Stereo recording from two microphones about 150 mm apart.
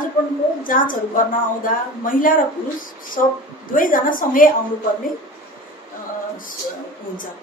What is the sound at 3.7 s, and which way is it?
Speech, 65° left (ahead or behind).